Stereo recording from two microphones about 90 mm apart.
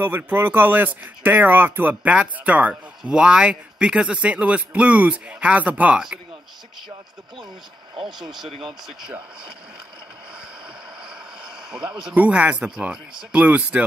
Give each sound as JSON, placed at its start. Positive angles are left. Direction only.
{"t": 0.0, "sound": "speech", "side_deg": -25}
{"t": 8.0, "sound": "speech", "side_deg": -5}
{"t": 11.1, "sound": "speech", "side_deg": -10}